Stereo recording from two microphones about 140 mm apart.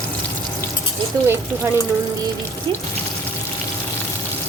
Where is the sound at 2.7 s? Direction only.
40° right (ahead or behind).